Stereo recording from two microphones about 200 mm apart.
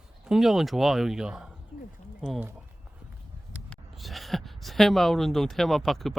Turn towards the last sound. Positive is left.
turn(degrees=0)  # may be behind; listen again after turning